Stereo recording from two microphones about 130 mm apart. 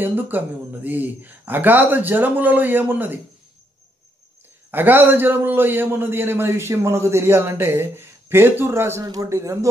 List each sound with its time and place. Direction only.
0.0 s a man's voice: 15° right (ahead or behind)
4.6 s a man's voice: 15° right (ahead or behind)